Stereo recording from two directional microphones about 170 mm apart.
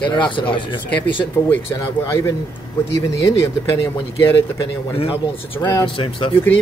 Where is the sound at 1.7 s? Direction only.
20° left (ahead or behind).